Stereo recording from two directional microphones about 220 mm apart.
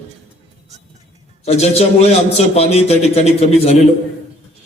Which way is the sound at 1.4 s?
30° left (ahead or behind).